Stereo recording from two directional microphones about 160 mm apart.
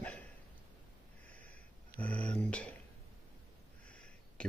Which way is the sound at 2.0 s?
10° left (ahead or behind).